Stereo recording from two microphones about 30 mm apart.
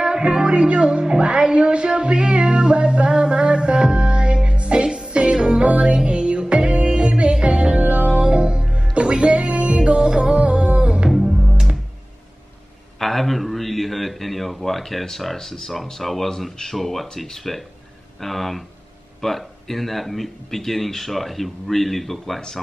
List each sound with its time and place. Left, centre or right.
0.0 s music: right
7.8 s music: right
8.2 s music: right
10.4 s music: right
11.1 s music: centre
13.0 s a man's voice: centre